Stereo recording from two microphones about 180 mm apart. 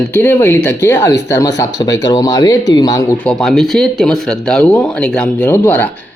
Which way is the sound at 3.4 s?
Centre (ahead or behind).